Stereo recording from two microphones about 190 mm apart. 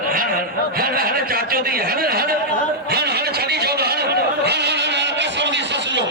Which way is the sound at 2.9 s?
55° right (ahead or behind).